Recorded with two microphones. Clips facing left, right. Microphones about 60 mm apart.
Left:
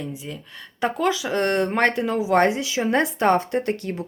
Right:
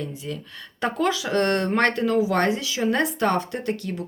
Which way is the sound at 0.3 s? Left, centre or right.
Centre.